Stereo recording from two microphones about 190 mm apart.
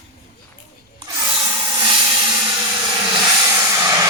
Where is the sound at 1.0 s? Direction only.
15° right (ahead or behind).